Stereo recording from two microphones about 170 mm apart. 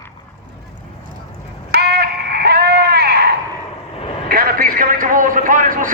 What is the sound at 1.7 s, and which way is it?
Sheep, 70° right (ahead or behind).